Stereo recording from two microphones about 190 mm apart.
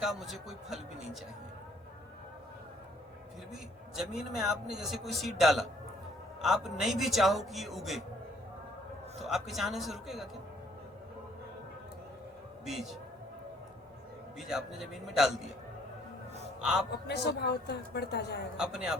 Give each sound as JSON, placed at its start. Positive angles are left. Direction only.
{"t": 0.0, "sound": "a man's voice", "side_deg": 0}
{"t": 3.5, "sound": "a man's voice", "side_deg": 0}
{"t": 9.2, "sound": "a man's voice", "side_deg": 0}
{"t": 12.6, "sound": "a man's voice", "side_deg": 0}
{"t": 14.3, "sound": "a man's voice", "side_deg": 0}
{"t": 16.6, "sound": "a man's voice", "side_deg": -5}
{"t": 17.1, "sound": "a woman's voice", "side_deg": 60}
{"t": 18.5, "sound": "a man's voice", "side_deg": -5}